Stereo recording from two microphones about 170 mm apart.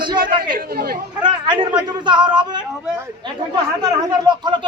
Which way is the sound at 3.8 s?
25° right (ahead or behind).